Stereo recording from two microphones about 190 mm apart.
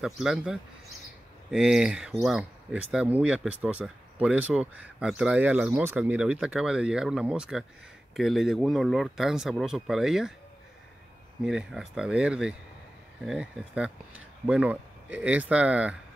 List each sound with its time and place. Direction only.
0.0 s speech: centre (ahead or behind)
11.4 s speech: centre (ahead or behind)